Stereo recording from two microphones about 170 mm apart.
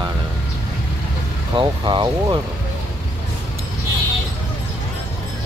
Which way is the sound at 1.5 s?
25° right (ahead or behind).